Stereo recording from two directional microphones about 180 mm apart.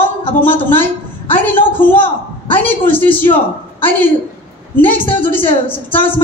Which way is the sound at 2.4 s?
30° left (ahead or behind).